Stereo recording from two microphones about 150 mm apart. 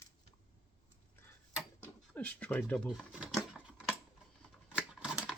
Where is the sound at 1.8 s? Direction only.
10° left (ahead or behind).